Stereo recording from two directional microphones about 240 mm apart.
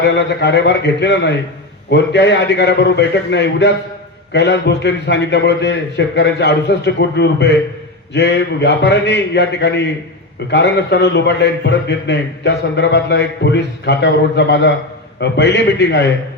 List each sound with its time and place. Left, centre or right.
0.0 s a man's voice: left